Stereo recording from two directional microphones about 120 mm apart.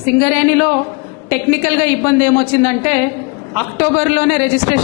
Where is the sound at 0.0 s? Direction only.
15° left (ahead or behind).